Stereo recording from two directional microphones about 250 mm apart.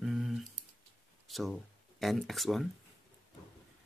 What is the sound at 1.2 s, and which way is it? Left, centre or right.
Speech, centre.